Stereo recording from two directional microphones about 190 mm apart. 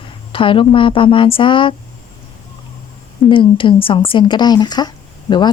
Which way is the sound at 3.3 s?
25° left (ahead or behind).